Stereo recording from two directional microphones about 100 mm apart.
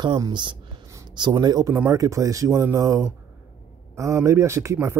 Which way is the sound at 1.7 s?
25° right (ahead or behind).